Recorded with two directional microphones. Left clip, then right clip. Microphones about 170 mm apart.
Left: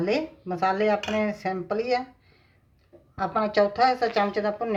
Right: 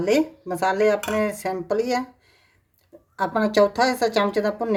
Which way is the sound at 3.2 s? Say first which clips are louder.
Right 4 dB; 90° right.